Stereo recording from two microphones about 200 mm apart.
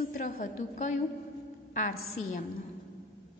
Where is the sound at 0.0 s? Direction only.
40° left (ahead or behind).